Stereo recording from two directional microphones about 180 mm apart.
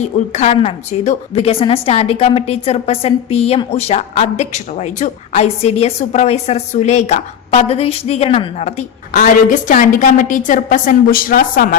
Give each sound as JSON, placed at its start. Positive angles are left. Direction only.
{"t": 0.0, "sound": "a woman's voice", "side_deg": 40}
{"t": 9.1, "sound": "a woman's voice", "side_deg": 50}